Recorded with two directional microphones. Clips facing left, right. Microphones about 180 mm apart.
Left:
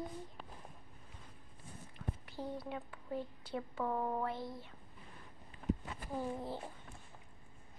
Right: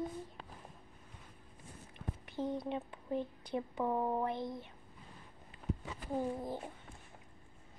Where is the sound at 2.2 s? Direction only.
20° right (ahead or behind).